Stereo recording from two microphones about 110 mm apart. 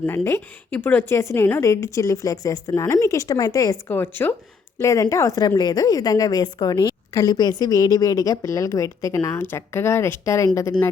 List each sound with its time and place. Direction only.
0.3 s a woman's voice: 20° left (ahead or behind)
3.8 s a woman's voice: 20° left (ahead or behind)
4.8 s a woman's voice: 30° left (ahead or behind)